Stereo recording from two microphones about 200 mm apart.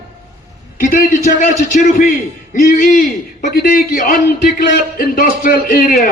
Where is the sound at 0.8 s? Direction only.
40° left (ahead or behind).